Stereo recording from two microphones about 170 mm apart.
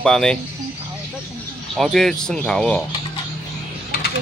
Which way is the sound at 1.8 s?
Centre (ahead or behind).